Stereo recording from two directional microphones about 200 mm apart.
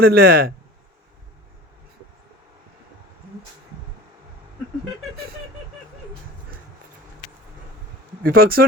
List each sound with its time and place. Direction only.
0.0 s speech: 50° right (ahead or behind)
8.2 s speech: 50° right (ahead or behind)